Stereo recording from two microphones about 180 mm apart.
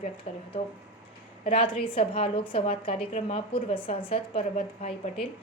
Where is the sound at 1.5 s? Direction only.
30° left (ahead or behind).